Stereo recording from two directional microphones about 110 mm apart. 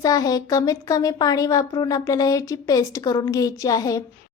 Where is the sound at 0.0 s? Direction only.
35° left (ahead or behind).